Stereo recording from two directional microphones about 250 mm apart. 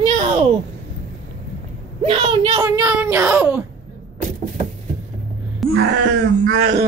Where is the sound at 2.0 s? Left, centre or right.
Centre.